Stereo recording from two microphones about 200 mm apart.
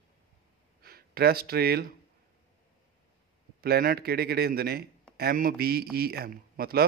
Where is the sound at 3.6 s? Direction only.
50° right (ahead or behind).